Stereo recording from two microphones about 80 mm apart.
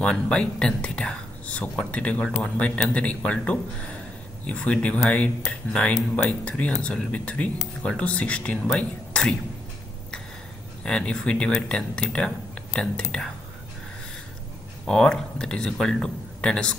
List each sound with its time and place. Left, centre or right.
0.0 s speech: centre
10.8 s speech: centre
14.9 s speech: centre